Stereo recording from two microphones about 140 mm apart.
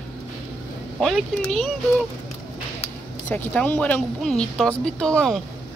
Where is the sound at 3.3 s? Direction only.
10° left (ahead or behind).